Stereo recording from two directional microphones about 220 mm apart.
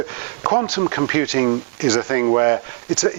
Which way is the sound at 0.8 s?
20° right (ahead or behind).